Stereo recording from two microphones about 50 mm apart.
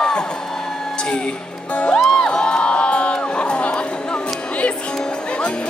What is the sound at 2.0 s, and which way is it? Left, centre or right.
Crowd, centre.